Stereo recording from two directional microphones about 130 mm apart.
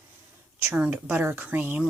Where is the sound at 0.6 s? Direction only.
10° right (ahead or behind).